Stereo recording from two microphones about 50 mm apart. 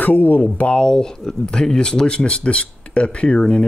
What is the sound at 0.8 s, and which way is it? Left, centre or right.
Speech, centre.